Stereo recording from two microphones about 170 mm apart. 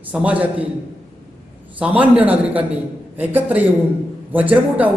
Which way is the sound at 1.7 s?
10° right (ahead or behind).